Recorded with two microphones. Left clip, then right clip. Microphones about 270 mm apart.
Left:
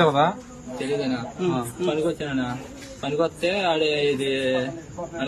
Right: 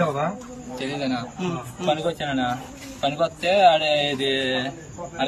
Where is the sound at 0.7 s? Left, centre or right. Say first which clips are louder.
Left 1 dB; centre.